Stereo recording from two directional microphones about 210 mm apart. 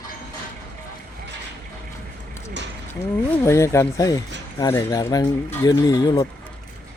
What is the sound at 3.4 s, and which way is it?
Speech, 15° left (ahead or behind).